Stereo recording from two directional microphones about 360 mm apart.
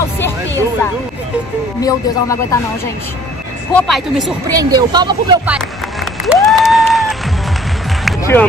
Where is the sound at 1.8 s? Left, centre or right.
Centre.